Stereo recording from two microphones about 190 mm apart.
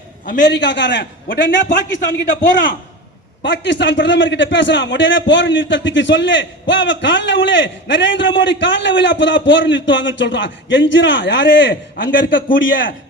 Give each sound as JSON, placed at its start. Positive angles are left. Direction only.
{"t": 0.4, "sound": "a man's voice", "side_deg": 65}
{"t": 3.4, "sound": "a man's voice", "side_deg": 70}
{"t": 12.5, "sound": "a man's voice", "side_deg": 80}